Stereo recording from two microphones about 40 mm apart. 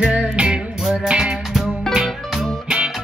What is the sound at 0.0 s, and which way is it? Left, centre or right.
Music, right.